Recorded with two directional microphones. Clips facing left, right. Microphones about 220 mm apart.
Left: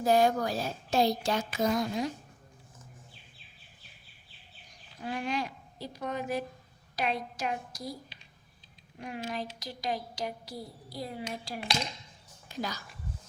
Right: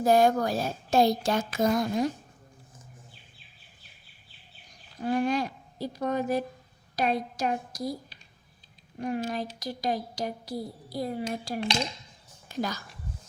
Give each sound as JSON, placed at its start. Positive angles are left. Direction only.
{"t": 0.0, "sound": "a woman's voice", "side_deg": -50}
{"t": 5.0, "sound": "a woman's voice", "side_deg": -40}